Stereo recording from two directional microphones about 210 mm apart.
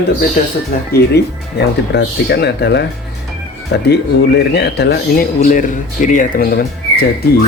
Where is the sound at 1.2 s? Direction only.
50° left (ahead or behind).